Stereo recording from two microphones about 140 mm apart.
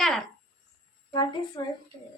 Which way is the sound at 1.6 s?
30° left (ahead or behind).